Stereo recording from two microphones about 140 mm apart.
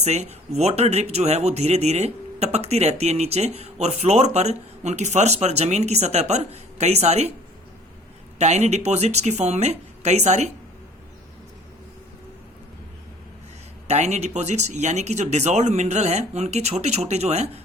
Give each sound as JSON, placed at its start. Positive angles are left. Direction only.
{"t": 0.0, "sound": "speech", "side_deg": -50}
{"t": 8.4, "sound": "speech", "side_deg": -55}
{"t": 13.8, "sound": "speech", "side_deg": -55}